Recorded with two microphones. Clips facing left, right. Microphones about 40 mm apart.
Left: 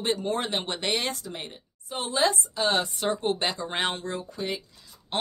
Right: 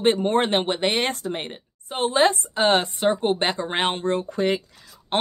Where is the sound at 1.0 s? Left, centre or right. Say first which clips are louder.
Right 7 dB; right.